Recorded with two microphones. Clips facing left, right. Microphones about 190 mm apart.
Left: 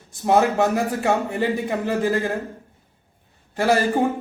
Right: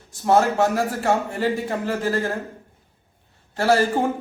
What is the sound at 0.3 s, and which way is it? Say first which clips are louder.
A man's voice: even; 15° left (ahead or behind).